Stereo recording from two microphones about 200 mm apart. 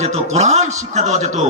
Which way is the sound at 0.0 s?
35° right (ahead or behind).